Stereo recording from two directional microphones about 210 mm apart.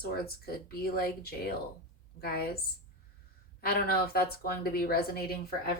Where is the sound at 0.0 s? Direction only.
45° left (ahead or behind).